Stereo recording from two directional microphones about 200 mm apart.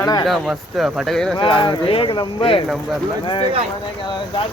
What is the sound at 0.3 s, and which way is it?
Speech, centre (ahead or behind).